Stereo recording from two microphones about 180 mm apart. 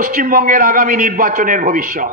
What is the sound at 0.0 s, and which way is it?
A man's voice, 50° right (ahead or behind).